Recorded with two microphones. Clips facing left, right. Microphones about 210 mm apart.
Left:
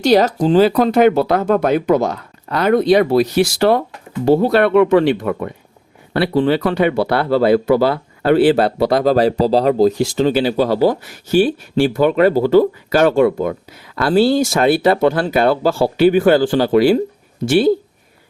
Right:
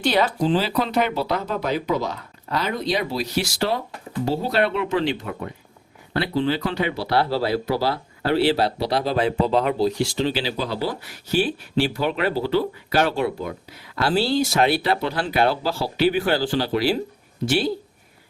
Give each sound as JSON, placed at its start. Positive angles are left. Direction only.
{"t": 0.0, "sound": "speech", "side_deg": 40}